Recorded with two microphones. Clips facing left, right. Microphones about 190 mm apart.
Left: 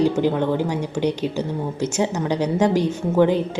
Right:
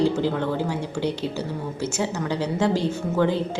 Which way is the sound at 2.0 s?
15° left (ahead or behind).